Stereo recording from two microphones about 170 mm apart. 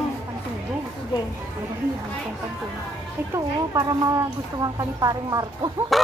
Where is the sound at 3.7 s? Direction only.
25° right (ahead or behind).